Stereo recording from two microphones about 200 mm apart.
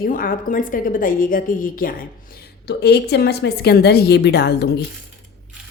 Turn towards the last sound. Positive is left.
turn(degrees=55)  # may be behind; listen again after turning